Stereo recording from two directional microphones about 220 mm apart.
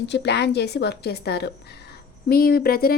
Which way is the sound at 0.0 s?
50° left (ahead or behind).